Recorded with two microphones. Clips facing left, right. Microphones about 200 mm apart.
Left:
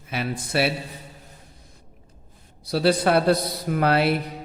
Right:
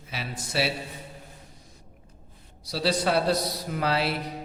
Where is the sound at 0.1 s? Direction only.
55° left (ahead or behind).